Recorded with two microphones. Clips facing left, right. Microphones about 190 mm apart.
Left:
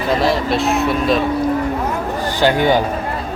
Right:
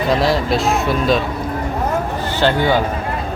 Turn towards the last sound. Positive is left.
turn(degrees=15)  # may be behind; listen again after turning